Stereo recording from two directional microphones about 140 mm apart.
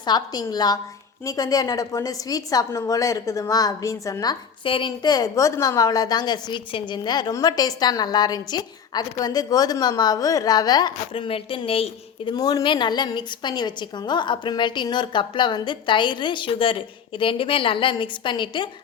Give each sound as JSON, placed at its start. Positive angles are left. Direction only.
{"t": 0.0, "sound": "a woman's voice", "side_deg": 30}
{"t": 12.3, "sound": "a woman's voice", "side_deg": 25}